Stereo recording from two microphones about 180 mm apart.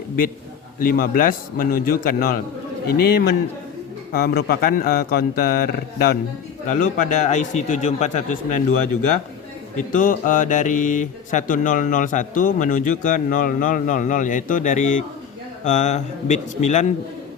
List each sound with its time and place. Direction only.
0.8 s speech: 55° left (ahead or behind)
6.7 s a man's voice: 45° left (ahead or behind)
9.7 s a man's voice: 50° left (ahead or behind)